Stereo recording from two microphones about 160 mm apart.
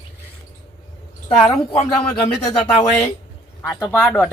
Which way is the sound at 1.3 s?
45° left (ahead or behind).